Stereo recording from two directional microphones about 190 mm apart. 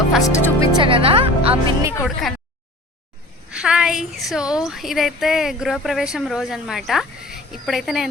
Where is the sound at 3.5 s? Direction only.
5° right (ahead or behind).